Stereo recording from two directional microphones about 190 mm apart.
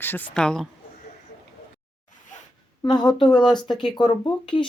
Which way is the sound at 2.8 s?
20° left (ahead or behind).